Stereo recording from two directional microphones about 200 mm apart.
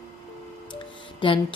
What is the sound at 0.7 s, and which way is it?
Music, 25° left (ahead or behind).